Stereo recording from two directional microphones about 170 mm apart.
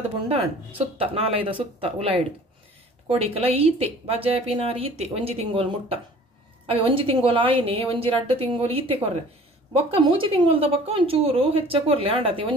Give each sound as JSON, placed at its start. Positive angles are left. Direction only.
{"t": 0.3, "sound": "speech", "side_deg": -35}